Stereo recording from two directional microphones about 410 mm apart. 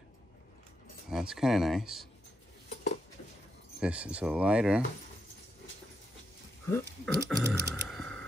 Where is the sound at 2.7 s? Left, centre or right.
Left.